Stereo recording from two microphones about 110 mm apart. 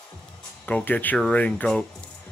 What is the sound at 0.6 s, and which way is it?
Speech, 15° left (ahead or behind).